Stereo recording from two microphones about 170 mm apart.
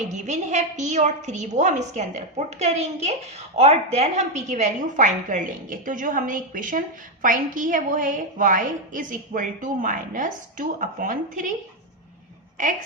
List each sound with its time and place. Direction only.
0.0 s a woman's voice: 45° right (ahead or behind)